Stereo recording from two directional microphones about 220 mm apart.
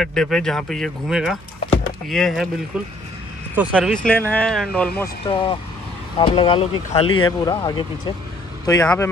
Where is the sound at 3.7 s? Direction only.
5° left (ahead or behind).